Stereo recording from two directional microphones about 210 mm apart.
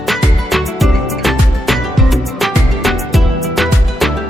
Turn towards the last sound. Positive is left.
turn(degrees=0)  # may be behind; listen again after turning